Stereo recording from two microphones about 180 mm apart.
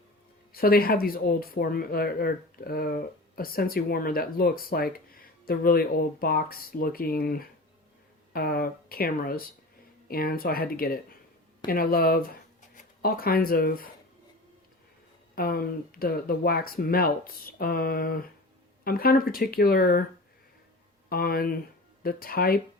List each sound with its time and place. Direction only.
0.5 s speech: 55° left (ahead or behind)
15.4 s speech: 55° left (ahead or behind)
21.1 s speech: 55° left (ahead or behind)